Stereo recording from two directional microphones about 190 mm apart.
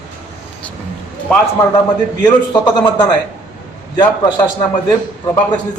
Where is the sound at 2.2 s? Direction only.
20° left (ahead or behind).